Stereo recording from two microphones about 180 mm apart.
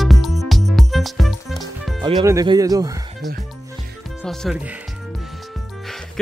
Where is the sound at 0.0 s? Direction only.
Centre (ahead or behind).